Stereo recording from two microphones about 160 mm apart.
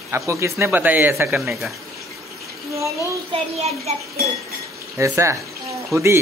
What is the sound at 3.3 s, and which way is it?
Speech, 40° right (ahead or behind).